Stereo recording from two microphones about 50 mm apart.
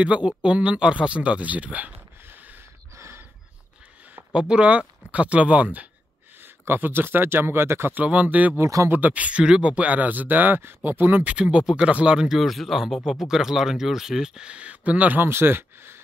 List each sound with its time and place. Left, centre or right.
0.0 s speech: right
2.2 s a sound: right
2.9 s a sound: right
4.3 s speech: centre
6.4 s speech: right
7.9 s speech: right
8.5 s speech: right
8.9 s speech: right
11.3 s speech: right
12.3 s speech: centre; by 15.2 s right
15.2 s speech: right